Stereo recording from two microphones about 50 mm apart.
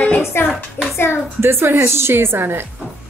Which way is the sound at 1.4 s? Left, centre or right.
Right.